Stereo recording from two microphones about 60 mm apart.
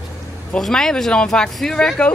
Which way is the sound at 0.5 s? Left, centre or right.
Centre.